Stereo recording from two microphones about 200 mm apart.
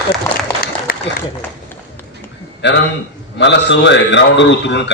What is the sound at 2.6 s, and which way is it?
A man's voice, 60° left (ahead or behind).